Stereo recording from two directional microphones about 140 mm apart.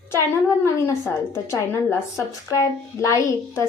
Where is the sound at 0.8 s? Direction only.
20° left (ahead or behind).